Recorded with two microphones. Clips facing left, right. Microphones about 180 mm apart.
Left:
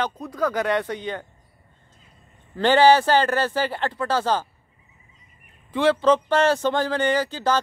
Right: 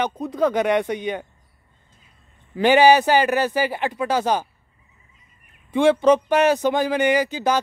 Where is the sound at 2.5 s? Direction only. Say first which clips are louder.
Right 2 dB; 10° right (ahead or behind).